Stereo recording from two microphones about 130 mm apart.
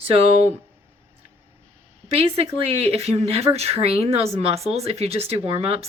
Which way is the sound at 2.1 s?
50° right (ahead or behind).